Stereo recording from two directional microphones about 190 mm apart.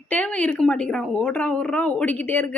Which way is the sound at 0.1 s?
10° left (ahead or behind).